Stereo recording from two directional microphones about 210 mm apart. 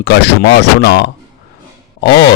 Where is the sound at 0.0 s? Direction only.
55° left (ahead or behind).